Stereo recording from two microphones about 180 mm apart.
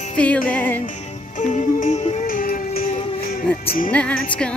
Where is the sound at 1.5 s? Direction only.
40° left (ahead or behind).